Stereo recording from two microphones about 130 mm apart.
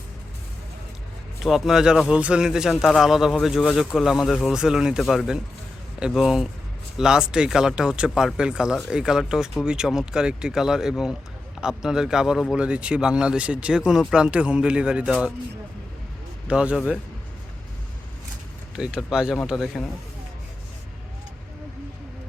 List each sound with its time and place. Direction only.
1.4 s speech: centre (ahead or behind)
16.5 s speech: 10° right (ahead or behind)
18.8 s speech: 5° right (ahead or behind)